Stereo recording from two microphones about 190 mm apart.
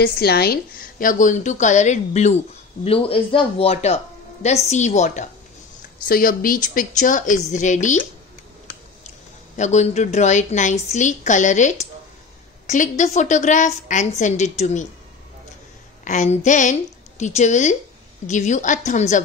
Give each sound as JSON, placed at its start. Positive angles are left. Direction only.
{"t": 0.0, "sound": "speech", "side_deg": 55}
{"t": 6.0, "sound": "a woman's voice", "side_deg": 50}
{"t": 9.6, "sound": "speech", "side_deg": 40}
{"t": 16.0, "sound": "speech", "side_deg": 40}